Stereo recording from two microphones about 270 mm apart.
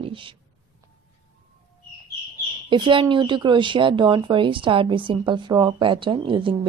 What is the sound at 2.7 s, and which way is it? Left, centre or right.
Speech, centre.